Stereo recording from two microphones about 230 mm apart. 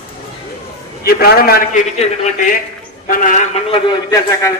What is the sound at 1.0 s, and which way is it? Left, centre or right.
Speech, left.